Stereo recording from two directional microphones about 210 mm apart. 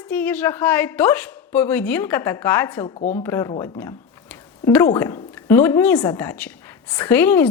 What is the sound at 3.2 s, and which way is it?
Speech, 10° left (ahead or behind).